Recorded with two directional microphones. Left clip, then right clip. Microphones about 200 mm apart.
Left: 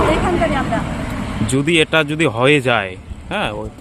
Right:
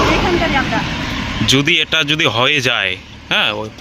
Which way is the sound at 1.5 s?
10° left (ahead or behind).